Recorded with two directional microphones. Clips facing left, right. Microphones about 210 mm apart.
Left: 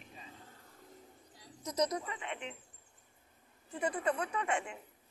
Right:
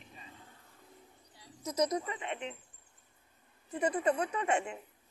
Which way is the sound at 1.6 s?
5° right (ahead or behind).